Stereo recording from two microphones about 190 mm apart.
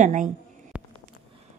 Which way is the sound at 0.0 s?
40° right (ahead or behind).